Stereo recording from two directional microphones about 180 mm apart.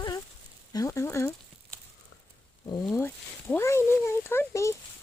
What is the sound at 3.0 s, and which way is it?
Speech, 10° left (ahead or behind).